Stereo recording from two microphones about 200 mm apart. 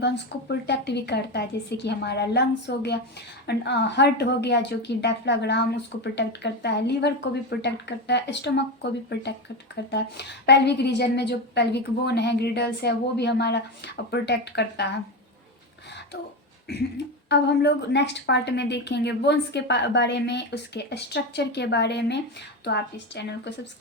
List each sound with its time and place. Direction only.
0.0 s a woman's voice: 60° left (ahead or behind)
17.2 s a woman's voice: 60° left (ahead or behind)